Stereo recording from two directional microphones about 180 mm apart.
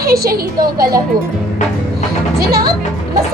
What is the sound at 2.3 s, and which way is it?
Speech, 60° right (ahead or behind).